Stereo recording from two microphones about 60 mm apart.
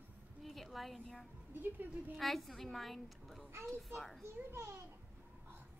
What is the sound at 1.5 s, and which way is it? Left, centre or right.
Speech, right.